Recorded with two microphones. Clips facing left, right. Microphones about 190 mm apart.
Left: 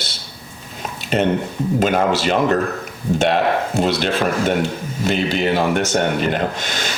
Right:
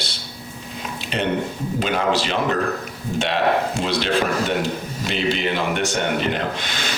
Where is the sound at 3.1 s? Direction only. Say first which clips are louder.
Left 3 dB; 45° left (ahead or behind).